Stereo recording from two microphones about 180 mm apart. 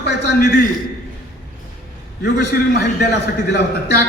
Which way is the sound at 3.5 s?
65° left (ahead or behind).